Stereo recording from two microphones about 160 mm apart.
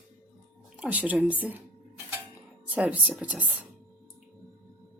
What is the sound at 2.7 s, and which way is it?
Speech, 10° right (ahead or behind).